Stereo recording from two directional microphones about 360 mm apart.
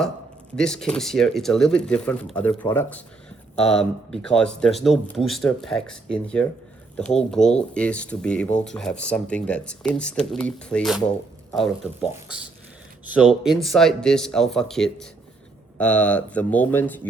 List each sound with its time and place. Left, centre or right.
0.5 s speech: centre
13.1 s speech: centre